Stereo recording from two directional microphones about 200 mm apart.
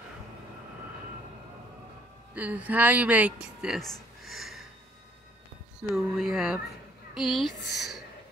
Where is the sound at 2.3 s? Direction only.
5° right (ahead or behind).